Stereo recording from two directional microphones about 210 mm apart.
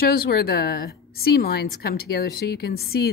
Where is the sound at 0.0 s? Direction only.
45° left (ahead or behind).